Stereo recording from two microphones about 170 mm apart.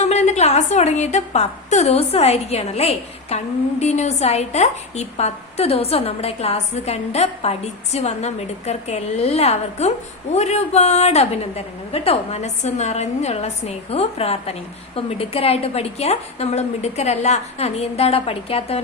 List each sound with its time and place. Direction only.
0.0 s a woman's voice: 40° left (ahead or behind)